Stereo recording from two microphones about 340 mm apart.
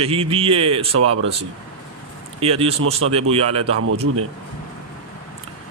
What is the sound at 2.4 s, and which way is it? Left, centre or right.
A man's voice, centre.